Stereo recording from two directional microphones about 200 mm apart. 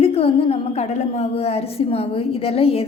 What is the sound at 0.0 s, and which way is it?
A woman's voice, 30° left (ahead or behind).